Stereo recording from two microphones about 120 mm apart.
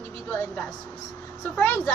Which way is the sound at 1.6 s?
15° left (ahead or behind).